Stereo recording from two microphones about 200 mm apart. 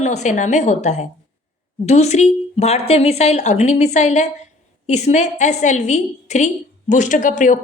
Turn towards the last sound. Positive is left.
turn(degrees=40)  # may be behind; listen again after turning